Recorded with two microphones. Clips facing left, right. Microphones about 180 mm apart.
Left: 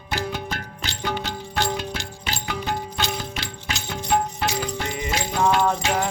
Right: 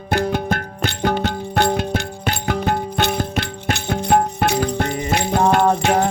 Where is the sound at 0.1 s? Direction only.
55° right (ahead or behind).